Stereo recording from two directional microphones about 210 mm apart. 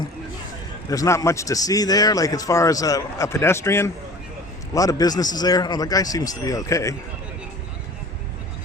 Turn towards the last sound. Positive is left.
turn(degrees=15)  # may be behind; listen again after turning